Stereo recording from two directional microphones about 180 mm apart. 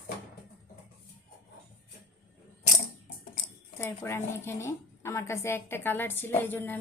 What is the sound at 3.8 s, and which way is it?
A woman's voice, 15° left (ahead or behind).